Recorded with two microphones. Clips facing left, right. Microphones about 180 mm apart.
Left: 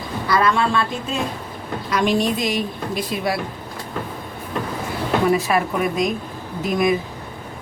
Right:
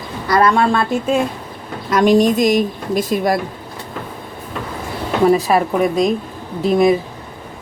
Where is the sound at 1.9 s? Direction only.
45° right (ahead or behind).